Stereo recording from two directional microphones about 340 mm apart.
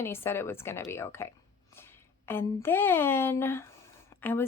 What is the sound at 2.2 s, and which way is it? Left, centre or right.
Speech, centre.